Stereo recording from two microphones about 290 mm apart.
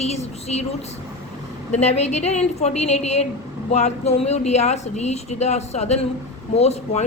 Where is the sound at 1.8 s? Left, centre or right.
Left.